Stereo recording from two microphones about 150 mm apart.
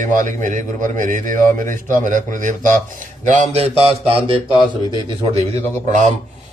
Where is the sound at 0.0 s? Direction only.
60° right (ahead or behind).